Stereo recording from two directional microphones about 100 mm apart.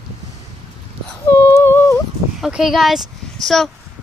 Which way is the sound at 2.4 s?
5° right (ahead or behind).